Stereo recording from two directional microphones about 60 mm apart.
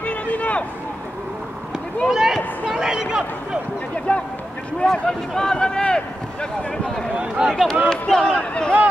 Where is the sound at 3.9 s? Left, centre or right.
Left.